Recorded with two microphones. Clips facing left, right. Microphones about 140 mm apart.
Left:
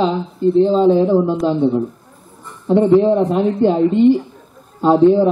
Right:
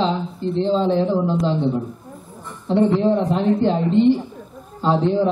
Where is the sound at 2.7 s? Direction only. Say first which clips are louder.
Left 5 dB; 15° left (ahead or behind).